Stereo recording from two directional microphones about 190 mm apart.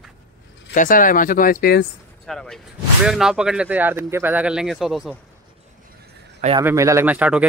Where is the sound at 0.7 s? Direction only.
45° left (ahead or behind).